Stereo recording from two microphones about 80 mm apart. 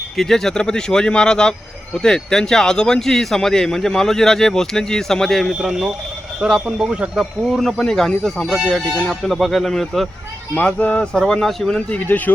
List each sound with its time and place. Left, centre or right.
0.2 s speech: centre
10.5 s speech: centre
11.9 s speech: centre